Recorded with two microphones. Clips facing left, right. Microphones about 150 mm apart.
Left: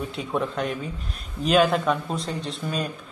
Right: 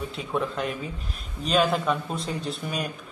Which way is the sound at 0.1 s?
Centre (ahead or behind).